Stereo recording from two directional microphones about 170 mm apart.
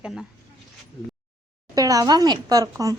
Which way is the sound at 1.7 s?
20° right (ahead or behind).